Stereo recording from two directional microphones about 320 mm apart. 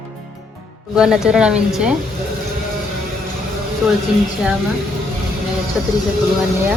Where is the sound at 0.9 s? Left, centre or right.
Centre.